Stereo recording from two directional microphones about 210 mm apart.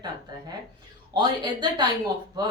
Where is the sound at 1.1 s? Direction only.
20° right (ahead or behind).